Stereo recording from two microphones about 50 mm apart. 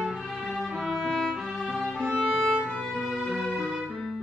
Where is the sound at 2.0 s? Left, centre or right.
Centre.